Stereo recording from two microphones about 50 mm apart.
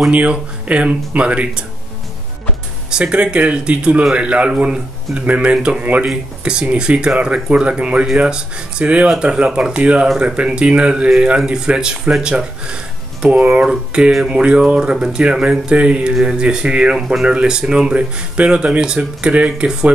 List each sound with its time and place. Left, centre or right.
0.1 s speech: right
2.9 s speech: centre